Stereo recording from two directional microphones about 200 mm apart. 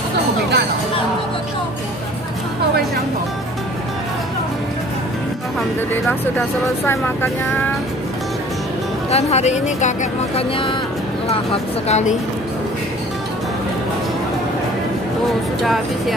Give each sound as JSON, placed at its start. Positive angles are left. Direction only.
{"t": 6.9, "sound": "speech", "side_deg": 10}
{"t": 9.1, "sound": "speech", "side_deg": 35}
{"t": 11.9, "sound": "speech", "side_deg": 35}